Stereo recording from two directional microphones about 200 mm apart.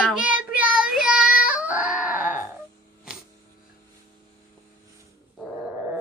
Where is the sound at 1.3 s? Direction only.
45° left (ahead or behind).